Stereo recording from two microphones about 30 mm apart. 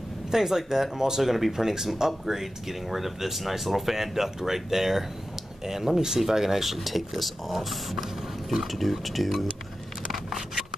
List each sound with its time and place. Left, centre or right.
0.3 s speech: centre
1.2 s speech: centre